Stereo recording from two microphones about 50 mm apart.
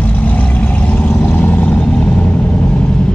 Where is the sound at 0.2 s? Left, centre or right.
Left.